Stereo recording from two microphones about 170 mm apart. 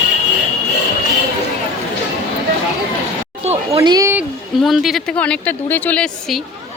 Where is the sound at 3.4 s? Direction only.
35° right (ahead or behind).